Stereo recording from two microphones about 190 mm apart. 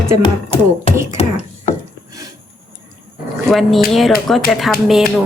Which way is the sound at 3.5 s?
Centre (ahead or behind).